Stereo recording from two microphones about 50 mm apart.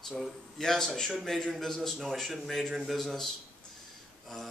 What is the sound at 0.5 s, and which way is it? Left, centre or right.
A man's voice, centre.